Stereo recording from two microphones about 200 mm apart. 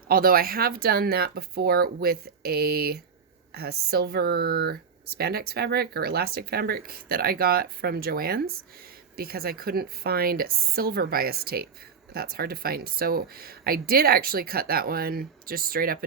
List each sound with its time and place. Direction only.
0.1 s speech: 45° right (ahead or behind)